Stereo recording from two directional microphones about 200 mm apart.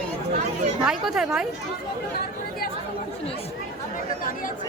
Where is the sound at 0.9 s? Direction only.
Centre (ahead or behind).